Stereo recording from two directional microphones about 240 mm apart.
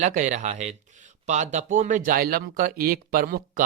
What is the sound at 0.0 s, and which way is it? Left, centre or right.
Speech, right.